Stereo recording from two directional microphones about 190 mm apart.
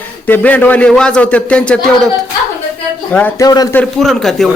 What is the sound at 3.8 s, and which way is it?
Speech, centre (ahead or behind).